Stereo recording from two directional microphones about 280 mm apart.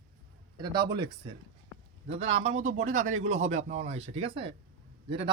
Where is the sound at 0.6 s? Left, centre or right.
Centre.